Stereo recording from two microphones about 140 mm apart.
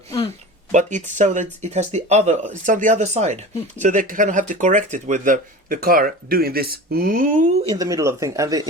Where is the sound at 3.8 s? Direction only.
70° right (ahead or behind).